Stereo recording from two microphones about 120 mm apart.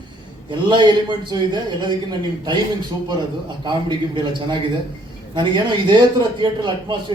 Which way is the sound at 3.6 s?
40° right (ahead or behind).